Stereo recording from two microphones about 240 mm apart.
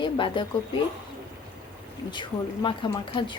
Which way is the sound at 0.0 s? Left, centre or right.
Centre.